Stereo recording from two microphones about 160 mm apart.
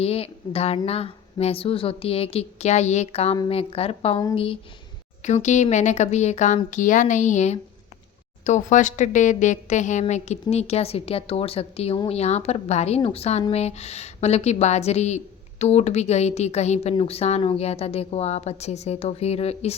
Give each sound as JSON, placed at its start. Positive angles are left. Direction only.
{"t": 0.0, "sound": "a woman's voice", "side_deg": 40}
{"t": 5.2, "sound": "a woman's voice", "side_deg": 50}